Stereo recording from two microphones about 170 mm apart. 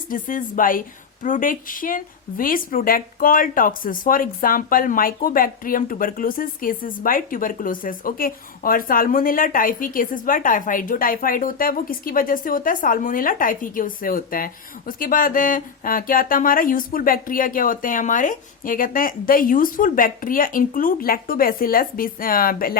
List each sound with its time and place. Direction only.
0.1 s a woman's voice: 50° left (ahead or behind)